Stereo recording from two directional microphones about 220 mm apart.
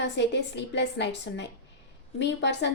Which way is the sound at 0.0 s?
50° left (ahead or behind).